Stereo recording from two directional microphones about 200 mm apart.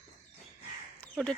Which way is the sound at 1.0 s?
5° left (ahead or behind).